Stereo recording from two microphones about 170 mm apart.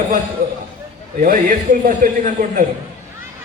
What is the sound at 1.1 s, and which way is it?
A man's voice, 50° right (ahead or behind).